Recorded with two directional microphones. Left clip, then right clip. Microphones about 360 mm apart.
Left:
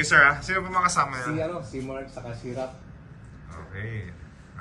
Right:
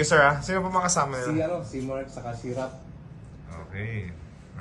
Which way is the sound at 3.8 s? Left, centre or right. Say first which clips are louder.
Right 1 dB; centre.